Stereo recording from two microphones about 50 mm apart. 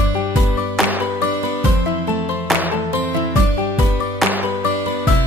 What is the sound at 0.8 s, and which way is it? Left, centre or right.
Music, centre.